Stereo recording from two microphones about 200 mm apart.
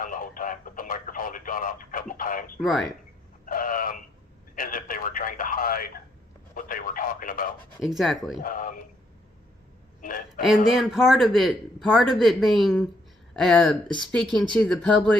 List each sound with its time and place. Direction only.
0.0 s radio: 45° left (ahead or behind)
2.6 s speech: centre (ahead or behind)
3.4 s a sound: 45° left (ahead or behind)
4.5 s radio: 45° left (ahead or behind)
7.8 s speech: centre (ahead or behind)
8.4 s speech: 40° left (ahead or behind)
10.0 s a sound: 45° left (ahead or behind)
10.7 s speech: centre (ahead or behind)